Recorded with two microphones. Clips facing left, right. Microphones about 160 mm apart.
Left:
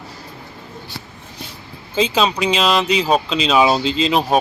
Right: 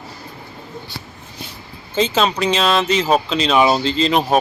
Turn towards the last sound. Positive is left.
turn(degrees=0)  # may be behind; listen again after turning